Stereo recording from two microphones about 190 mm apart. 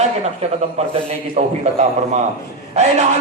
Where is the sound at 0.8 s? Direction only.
35° right (ahead or behind).